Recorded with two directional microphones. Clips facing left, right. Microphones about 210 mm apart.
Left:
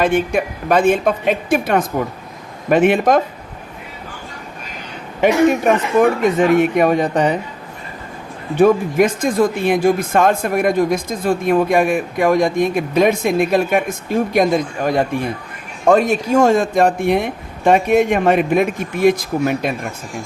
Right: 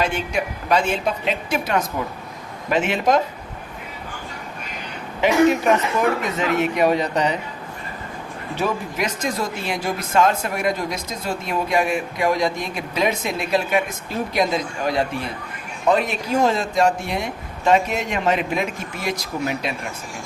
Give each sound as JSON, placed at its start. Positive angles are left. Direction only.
{"t": 0.0, "sound": "speech", "side_deg": 50}
{"t": 6.0, "sound": "speech", "side_deg": 50}
{"t": 8.5, "sound": "speech", "side_deg": 50}